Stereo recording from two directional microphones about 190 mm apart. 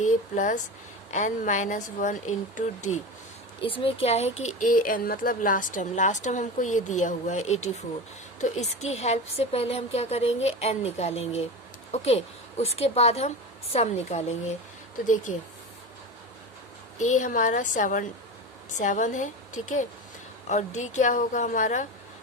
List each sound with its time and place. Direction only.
0.0 s speech: 40° left (ahead or behind)
17.0 s speech: 40° left (ahead or behind)
20.5 s speech: 40° left (ahead or behind)